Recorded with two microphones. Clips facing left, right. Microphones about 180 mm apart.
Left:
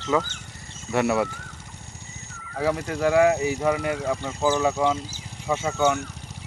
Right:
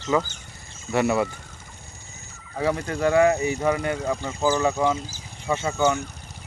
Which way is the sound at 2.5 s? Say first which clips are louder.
Even; centre (ahead or behind).